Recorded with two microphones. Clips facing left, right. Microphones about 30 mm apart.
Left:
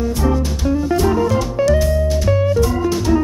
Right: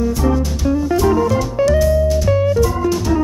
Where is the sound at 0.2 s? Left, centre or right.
Centre.